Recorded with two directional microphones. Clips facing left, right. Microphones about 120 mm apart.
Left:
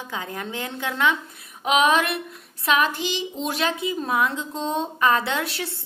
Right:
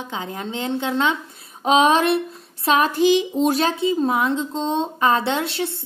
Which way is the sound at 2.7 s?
40° right (ahead or behind).